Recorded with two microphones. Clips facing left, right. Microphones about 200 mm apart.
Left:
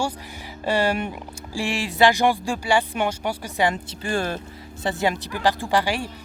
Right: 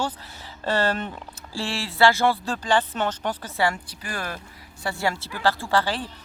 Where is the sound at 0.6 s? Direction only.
10° left (ahead or behind).